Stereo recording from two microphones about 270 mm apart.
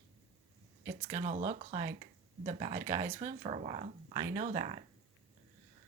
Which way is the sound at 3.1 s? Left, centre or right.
Right.